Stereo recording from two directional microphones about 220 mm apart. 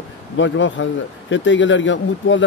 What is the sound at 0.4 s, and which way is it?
A man's voice, 55° left (ahead or behind).